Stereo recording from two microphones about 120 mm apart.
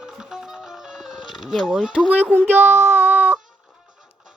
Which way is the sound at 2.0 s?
10° right (ahead or behind).